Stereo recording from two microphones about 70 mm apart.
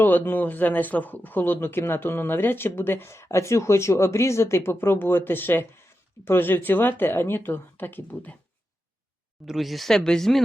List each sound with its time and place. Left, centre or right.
0.0 s speech: left
9.5 s speech: centre